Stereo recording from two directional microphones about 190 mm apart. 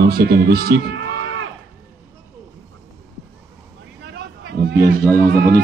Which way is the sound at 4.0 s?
60° right (ahead or behind).